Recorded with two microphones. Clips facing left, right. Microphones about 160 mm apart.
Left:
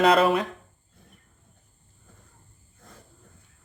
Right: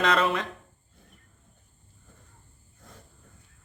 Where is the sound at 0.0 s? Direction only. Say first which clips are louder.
Left 5 dB; 35° left (ahead or behind).